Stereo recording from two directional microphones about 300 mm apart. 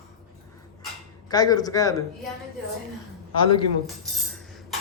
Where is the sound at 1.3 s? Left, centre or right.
Centre.